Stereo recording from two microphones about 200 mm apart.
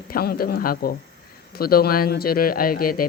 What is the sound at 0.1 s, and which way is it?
A man's voice, 50° left (ahead or behind).